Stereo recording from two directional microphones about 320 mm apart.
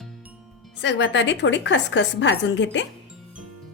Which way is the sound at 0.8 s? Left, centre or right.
Left.